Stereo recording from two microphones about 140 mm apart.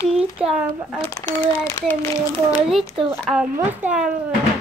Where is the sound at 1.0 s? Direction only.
20° left (ahead or behind).